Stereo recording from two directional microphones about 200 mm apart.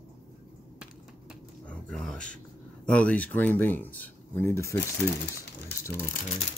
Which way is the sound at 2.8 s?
5° left (ahead or behind).